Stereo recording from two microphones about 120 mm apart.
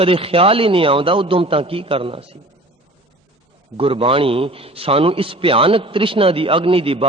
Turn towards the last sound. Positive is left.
turn(degrees=-50)  # may be behind; listen again after turning